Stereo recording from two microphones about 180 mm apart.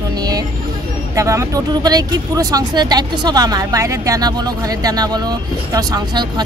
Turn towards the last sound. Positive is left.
turn(degrees=-20)  # may be behind; listen again after turning